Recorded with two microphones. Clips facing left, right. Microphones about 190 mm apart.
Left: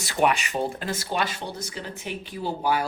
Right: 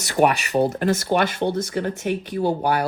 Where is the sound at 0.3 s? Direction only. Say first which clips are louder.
Right 2 dB; 35° right (ahead or behind).